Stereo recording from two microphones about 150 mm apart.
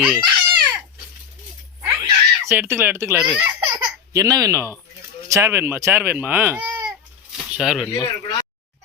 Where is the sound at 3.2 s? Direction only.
5° right (ahead or behind).